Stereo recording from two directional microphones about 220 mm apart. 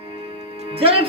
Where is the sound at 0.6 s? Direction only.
25° right (ahead or behind).